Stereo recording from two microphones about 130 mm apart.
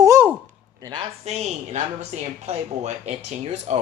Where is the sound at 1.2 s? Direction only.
55° right (ahead or behind).